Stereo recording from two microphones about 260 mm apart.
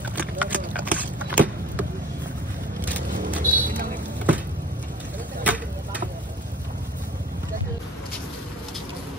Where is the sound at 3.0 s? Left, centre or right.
Right.